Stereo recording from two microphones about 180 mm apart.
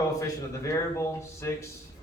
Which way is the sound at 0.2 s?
15° left (ahead or behind).